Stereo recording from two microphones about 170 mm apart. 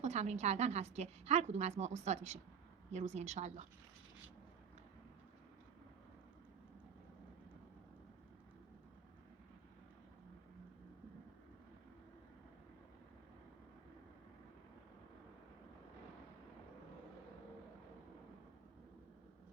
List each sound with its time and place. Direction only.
0.0 s a woman's voice: 40° right (ahead or behind)